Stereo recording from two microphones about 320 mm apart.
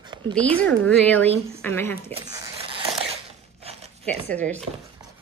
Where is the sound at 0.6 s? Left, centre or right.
Centre.